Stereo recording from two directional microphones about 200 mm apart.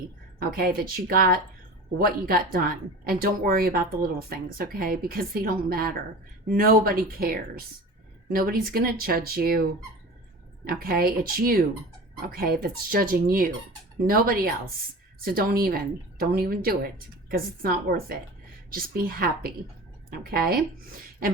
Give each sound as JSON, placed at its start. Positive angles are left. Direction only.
{"t": 0.3, "sound": "speech", "side_deg": -45}
{"t": 10.7, "sound": "speech", "side_deg": -50}
{"t": 21.2, "sound": "beatboxing", "side_deg": -45}